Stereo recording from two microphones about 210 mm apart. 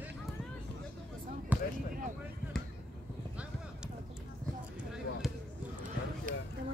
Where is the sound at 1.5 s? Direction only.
10° right (ahead or behind).